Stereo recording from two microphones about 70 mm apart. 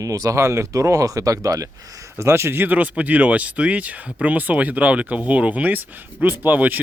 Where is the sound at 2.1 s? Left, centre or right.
Right.